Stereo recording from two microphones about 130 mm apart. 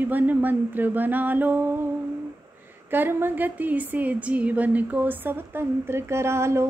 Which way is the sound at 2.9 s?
15° right (ahead or behind).